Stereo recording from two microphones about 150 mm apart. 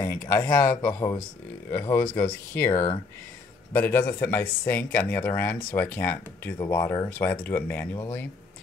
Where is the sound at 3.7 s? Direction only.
10° left (ahead or behind).